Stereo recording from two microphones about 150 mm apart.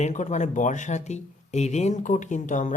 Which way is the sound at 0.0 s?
50° left (ahead or behind).